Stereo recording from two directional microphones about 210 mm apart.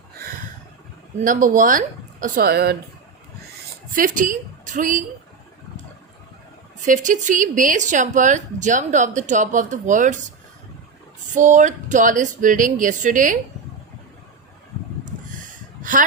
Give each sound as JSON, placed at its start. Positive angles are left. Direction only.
{"t": 1.2, "sound": "speech", "side_deg": -40}
{"t": 3.9, "sound": "a woman's voice", "side_deg": -40}
{"t": 6.8, "sound": "speech", "side_deg": -35}
{"t": 11.3, "sound": "speech", "side_deg": -35}
{"t": 15.8, "sound": "speech", "side_deg": -40}